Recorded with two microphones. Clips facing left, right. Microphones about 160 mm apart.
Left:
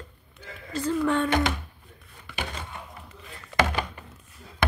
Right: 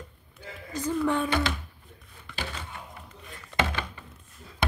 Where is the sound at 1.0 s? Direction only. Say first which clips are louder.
Left 2 dB; 15° right (ahead or behind).